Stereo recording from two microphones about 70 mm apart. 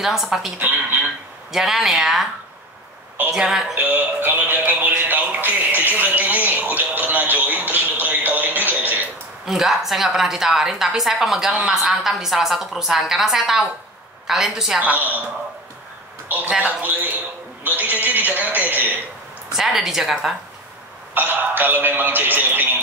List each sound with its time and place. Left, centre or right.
0.0 s a woman's voice: centre
0.6 s speech: right
1.5 s a woman's voice: centre
3.3 s a woman's voice: centre
3.7 s speech: right
9.5 s a woman's voice: centre
14.8 s speech: right
16.3 s speech: right
19.5 s a woman's voice: centre
21.1 s speech: right